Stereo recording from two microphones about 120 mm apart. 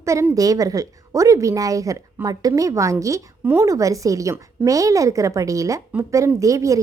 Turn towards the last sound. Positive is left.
turn(degrees=-25)  # may be behind; listen again after turning